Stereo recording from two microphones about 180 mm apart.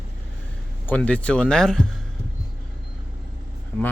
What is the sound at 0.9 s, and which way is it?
Speech, 10° left (ahead or behind).